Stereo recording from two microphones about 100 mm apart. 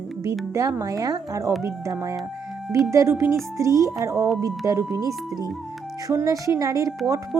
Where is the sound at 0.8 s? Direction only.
35° right (ahead or behind).